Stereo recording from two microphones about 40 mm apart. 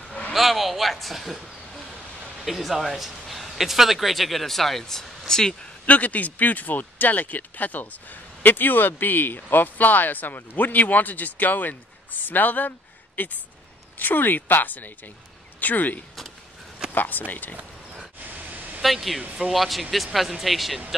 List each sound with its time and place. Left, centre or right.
0.3 s speech: centre
5.9 s speech: left
18.2 s vehicle: right
18.8 s speech: centre